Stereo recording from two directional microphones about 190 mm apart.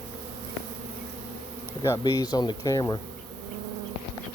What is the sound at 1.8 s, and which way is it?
Speech, 15° left (ahead or behind).